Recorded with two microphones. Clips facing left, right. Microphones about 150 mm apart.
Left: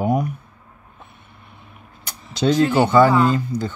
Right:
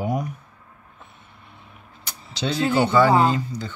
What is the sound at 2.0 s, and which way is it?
Speech, 50° left (ahead or behind).